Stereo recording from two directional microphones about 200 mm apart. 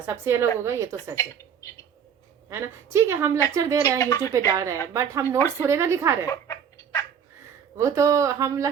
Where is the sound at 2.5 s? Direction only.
15° right (ahead or behind).